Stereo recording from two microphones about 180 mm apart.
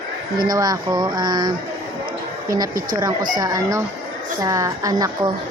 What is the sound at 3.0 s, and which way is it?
Speech, 20° right (ahead or behind).